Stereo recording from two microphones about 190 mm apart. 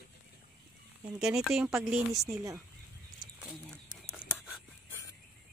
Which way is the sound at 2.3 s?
20° right (ahead or behind).